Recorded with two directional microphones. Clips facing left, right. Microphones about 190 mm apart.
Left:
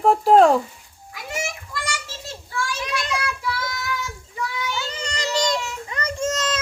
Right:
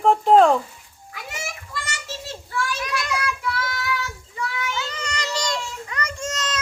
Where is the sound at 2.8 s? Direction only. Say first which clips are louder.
Even; 25° left (ahead or behind).